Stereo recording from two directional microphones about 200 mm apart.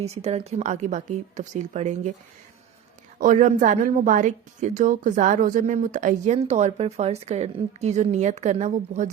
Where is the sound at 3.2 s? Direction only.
40° right (ahead or behind).